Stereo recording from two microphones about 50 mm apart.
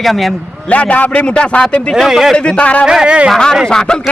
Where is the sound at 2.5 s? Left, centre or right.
Left.